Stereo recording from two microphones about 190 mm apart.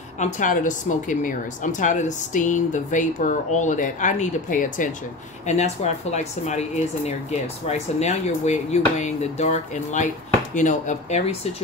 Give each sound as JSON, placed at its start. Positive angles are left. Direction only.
{"t": 0.2, "sound": "speech", "side_deg": 45}